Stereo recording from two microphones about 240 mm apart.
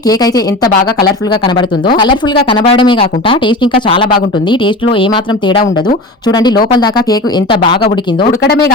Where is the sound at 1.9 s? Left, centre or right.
Centre.